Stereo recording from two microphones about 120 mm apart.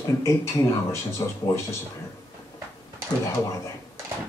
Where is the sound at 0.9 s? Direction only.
25° left (ahead or behind).